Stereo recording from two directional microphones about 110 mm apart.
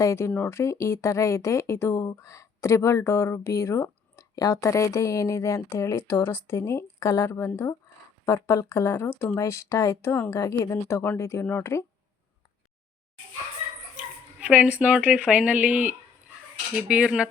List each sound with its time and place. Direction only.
0.0 s speech: 25° left (ahead or behind)
14.3 s speech: 10° right (ahead or behind)